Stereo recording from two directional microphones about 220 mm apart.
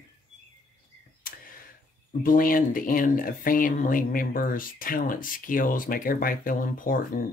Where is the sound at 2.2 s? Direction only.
40° left (ahead or behind).